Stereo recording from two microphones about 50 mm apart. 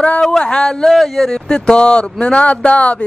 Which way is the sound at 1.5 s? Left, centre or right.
Centre.